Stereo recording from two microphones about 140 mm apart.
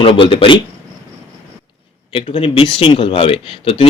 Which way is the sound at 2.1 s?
40° left (ahead or behind).